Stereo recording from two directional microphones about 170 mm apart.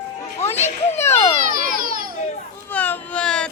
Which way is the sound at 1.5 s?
55° right (ahead or behind).